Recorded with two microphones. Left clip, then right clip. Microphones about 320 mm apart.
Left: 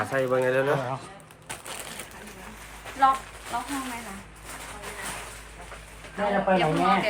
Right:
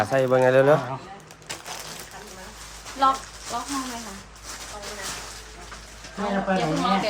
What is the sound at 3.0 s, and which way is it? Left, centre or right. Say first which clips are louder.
Speech: even; centre.